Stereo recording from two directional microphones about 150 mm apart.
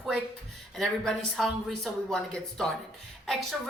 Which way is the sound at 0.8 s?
Centre (ahead or behind).